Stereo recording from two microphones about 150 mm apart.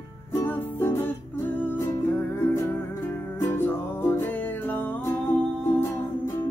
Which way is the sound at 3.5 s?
15° left (ahead or behind).